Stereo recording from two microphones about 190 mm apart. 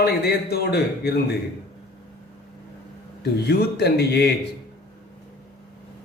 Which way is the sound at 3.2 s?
60° left (ahead or behind).